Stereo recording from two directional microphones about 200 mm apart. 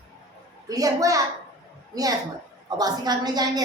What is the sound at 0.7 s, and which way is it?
Speech, 15° right (ahead or behind).